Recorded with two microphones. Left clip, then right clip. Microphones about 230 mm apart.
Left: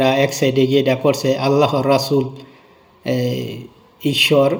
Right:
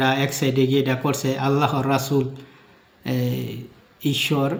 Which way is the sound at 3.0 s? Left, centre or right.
Centre.